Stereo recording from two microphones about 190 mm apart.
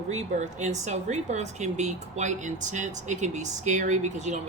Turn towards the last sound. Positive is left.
turn(degrees=-40)  # may be behind; listen again after turning